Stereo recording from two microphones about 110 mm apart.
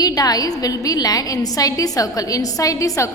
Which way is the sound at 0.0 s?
35° left (ahead or behind).